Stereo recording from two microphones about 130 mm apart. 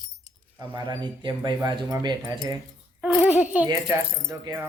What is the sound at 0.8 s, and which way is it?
Speech, 35° right (ahead or behind).